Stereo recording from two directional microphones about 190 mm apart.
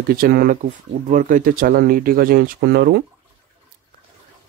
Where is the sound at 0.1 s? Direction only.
50° right (ahead or behind).